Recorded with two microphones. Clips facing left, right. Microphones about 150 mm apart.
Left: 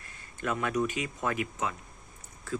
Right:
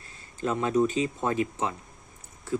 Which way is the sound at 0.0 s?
30° right (ahead or behind).